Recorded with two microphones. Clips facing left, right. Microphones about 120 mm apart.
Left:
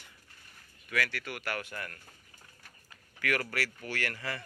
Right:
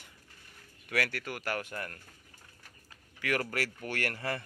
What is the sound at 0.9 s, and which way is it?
Speech, 50° right (ahead or behind).